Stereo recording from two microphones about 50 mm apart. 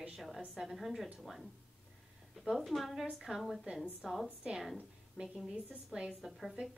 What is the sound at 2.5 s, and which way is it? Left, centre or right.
A woman's voice, centre.